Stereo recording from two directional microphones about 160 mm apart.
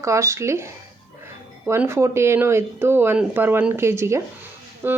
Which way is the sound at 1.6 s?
15° right (ahead or behind).